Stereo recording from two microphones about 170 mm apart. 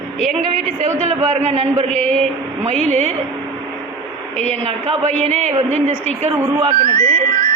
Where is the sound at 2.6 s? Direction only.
45° right (ahead or behind).